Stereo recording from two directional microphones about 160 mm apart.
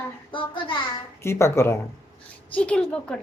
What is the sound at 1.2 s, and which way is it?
A woman's voice, 15° left (ahead or behind).